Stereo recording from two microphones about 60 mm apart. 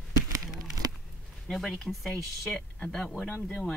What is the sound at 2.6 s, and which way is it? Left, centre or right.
Speech, centre.